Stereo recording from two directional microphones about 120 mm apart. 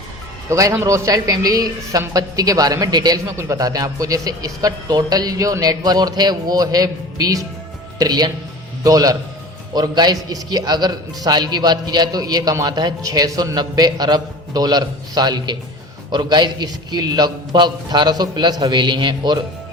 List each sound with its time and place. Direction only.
0.5 s a man's voice: 20° right (ahead or behind); by 19.4 s 40° right (ahead or behind)